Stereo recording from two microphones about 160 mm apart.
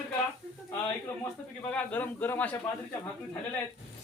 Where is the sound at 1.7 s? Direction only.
10° left (ahead or behind).